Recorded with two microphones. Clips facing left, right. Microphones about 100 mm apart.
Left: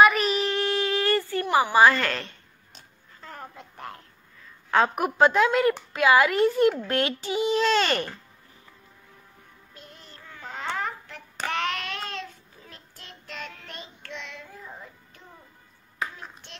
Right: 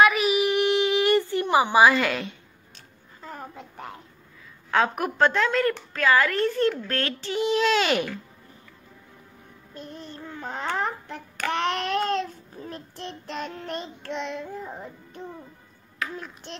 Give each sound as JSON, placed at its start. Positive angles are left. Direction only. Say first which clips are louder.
{"t": 0.0, "sound": "a sound", "louder": "even", "side_deg": -5}
{"t": 4.6, "sound": "a woman's voice", "louder": "left 1 dB", "side_deg": 0}
{"t": 10.1, "sound": "babbling", "louder": "right 4 dB", "side_deg": -25}
{"t": 11.5, "sound": "child singing", "louder": "right 6 dB", "side_deg": -30}